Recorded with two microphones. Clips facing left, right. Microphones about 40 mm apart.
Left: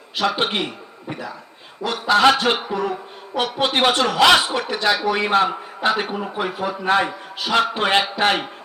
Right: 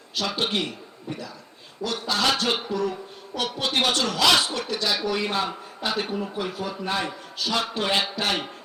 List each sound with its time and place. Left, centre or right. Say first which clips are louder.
0.2 s a man's voice: left 5 dB; left
4.4 s speech: left 6 dB; centre
4.7 s a man's voice: left 7 dB; left